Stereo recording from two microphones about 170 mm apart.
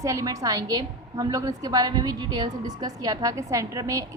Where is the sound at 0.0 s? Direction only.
20° right (ahead or behind).